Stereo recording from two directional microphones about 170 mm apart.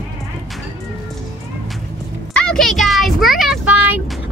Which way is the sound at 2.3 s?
5° left (ahead or behind).